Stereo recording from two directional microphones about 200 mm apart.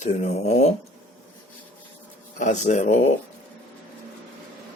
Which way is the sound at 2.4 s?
35° left (ahead or behind).